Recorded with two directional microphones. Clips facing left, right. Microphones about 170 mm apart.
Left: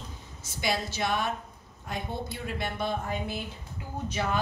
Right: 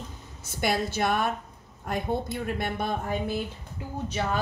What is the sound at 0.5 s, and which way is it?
Speech, 55° right (ahead or behind).